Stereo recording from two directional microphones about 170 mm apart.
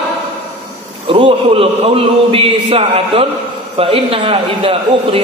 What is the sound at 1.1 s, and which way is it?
A man's voice, 30° right (ahead or behind).